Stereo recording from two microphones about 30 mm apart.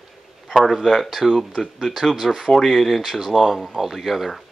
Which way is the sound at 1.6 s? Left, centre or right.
Left.